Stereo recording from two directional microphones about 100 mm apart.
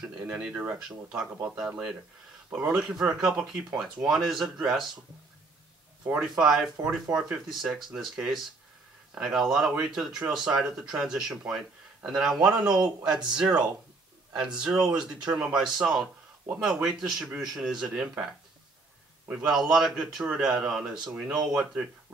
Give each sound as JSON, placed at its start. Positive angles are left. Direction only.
{"t": 0.0, "sound": "speech", "side_deg": -10}
{"t": 1.0, "sound": "speech", "side_deg": -25}
{"t": 1.5, "sound": "speech", "side_deg": -10}
{"t": 6.2, "sound": "speech", "side_deg": -5}
{"t": 6.8, "sound": "speech", "side_deg": -15}
{"t": 14.4, "sound": "speech", "side_deg": -10}